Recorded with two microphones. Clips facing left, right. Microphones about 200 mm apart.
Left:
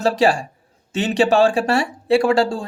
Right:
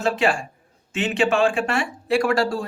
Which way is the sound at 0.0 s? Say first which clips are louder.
Left 4 dB; 40° left (ahead or behind).